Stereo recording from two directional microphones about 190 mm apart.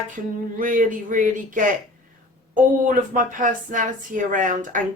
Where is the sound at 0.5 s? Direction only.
45° right (ahead or behind).